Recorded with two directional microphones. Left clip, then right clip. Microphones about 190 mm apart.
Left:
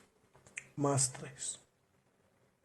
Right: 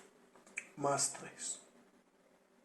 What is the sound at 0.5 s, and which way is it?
Speech, 60° left (ahead or behind).